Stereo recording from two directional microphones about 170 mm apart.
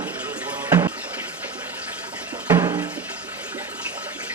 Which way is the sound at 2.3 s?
10° right (ahead or behind).